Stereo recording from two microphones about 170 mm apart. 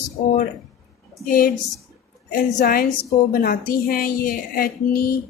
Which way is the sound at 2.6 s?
55° left (ahead or behind).